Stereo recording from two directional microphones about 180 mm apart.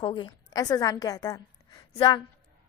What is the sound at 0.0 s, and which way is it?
A woman's voice, 25° left (ahead or behind).